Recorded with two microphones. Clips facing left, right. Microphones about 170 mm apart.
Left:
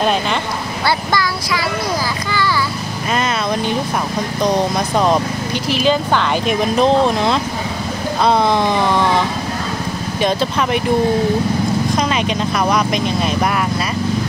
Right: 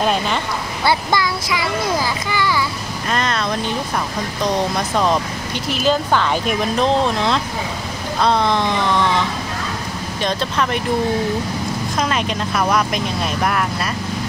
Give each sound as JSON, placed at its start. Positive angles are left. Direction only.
{"t": 0.8, "sound": "child singing", "side_deg": -20}
{"t": 3.1, "sound": "speech", "side_deg": 5}
{"t": 4.9, "sound": "speech", "side_deg": 10}
{"t": 10.2, "sound": "speech", "side_deg": 5}
{"t": 12.0, "sound": "speech", "side_deg": 0}